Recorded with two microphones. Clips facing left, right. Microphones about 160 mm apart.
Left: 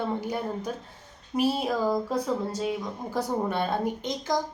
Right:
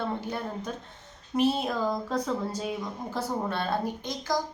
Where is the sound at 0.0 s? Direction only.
10° left (ahead or behind).